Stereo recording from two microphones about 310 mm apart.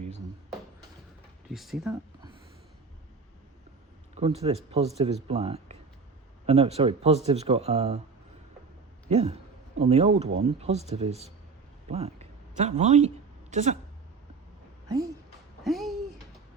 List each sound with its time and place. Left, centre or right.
1.5 s speech: centre
4.1 s speech: centre
9.0 s a woman's voice: centre
15.6 s a sound: centre